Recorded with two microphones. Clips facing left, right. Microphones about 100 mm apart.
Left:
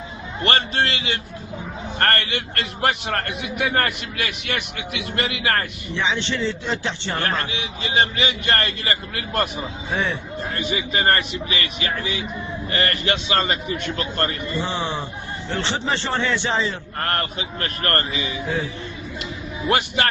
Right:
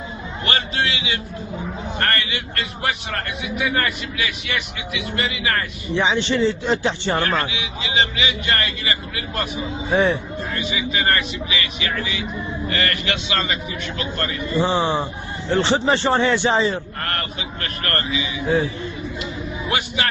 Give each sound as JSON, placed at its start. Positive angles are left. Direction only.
{"t": 0.4, "sound": "a man's voice", "side_deg": 45}
{"t": 3.7, "sound": "a man's voice", "side_deg": 45}
{"t": 6.0, "sound": "a man's voice", "side_deg": -15}
{"t": 7.8, "sound": "a man's voice", "side_deg": 45}
{"t": 9.9, "sound": "speech", "side_deg": -25}
{"t": 10.5, "sound": "a man's voice", "side_deg": 45}
{"t": 14.6, "sound": "a man's voice", "side_deg": -25}
{"t": 15.5, "sound": "a man's voice", "side_deg": -15}
{"t": 17.0, "sound": "a man's voice", "side_deg": 30}
{"t": 19.6, "sound": "a man's voice", "side_deg": 45}